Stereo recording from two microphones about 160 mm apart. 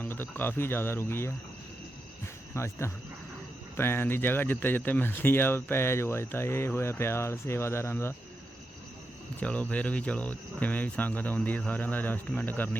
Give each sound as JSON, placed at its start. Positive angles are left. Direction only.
{"t": 0.0, "sound": "speech", "side_deg": 10}
{"t": 2.6, "sound": "speech", "side_deg": 15}
{"t": 9.4, "sound": "speech", "side_deg": 10}